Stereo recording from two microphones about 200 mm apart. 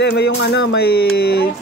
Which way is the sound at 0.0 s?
55° left (ahead or behind).